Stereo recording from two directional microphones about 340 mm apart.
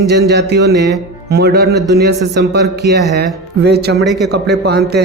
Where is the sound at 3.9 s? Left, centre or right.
Centre.